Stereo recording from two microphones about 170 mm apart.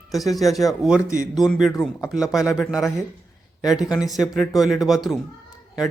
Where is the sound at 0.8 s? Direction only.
5° right (ahead or behind).